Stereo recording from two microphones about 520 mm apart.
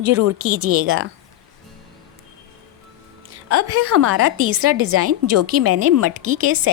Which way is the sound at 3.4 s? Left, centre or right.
Right.